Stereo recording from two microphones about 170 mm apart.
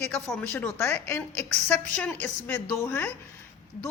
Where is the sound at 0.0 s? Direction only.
10° left (ahead or behind).